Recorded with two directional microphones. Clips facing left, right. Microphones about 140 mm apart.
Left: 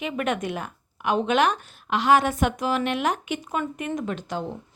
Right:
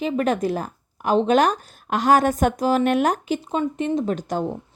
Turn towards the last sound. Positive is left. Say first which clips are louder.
# right 6 dB
turn(degrees=-45)  # may be behind; listen again after turning